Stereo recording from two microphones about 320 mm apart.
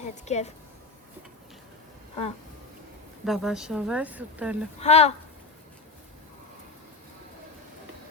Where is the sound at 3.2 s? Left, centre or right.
Centre.